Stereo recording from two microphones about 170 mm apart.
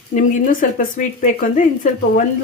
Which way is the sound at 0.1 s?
50° left (ahead or behind).